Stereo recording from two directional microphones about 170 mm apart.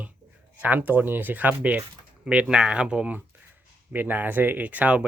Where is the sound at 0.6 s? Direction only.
10° right (ahead or behind).